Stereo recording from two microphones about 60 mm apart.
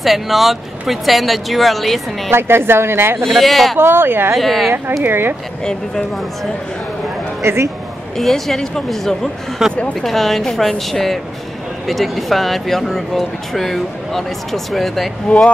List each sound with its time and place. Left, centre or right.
0.0 s speech: centre
2.3 s speech: right
3.3 s speech: centre
3.7 s speech: right
4.4 s speech: centre
5.0 s speech: right
7.4 s speech: right
8.2 s speech: centre
9.6 s speech: centre
10.0 s speech: centre
15.2 s speech: centre